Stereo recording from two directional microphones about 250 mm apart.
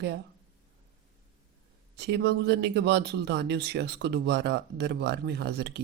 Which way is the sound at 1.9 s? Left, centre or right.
Right.